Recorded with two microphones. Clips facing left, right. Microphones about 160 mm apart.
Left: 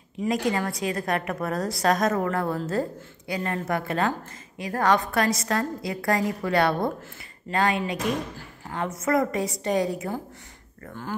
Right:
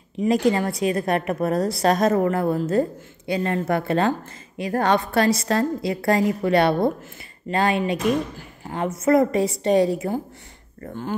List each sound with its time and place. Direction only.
0.3 s speech: 30° right (ahead or behind)